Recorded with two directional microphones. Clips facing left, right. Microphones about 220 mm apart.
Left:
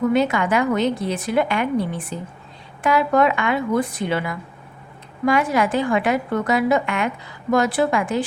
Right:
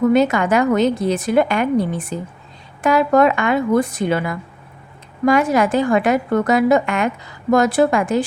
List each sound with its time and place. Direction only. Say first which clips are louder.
0.1 s a woman's voice: right 4 dB; 45° right (ahead or behind)